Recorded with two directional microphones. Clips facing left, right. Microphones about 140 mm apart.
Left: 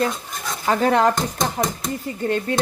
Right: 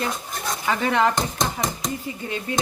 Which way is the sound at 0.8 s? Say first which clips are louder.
Left 4 dB; 40° left (ahead or behind).